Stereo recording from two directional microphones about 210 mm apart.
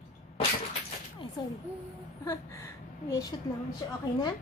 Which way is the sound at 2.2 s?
15° left (ahead or behind).